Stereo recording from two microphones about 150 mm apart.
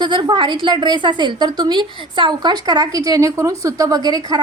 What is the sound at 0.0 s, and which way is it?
A woman's voice, 30° right (ahead or behind).